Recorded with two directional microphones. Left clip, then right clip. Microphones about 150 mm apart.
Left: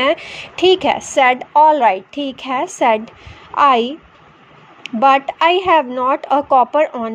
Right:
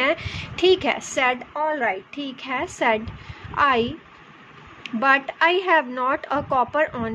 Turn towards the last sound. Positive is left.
turn(degrees=25)  # may be behind; listen again after turning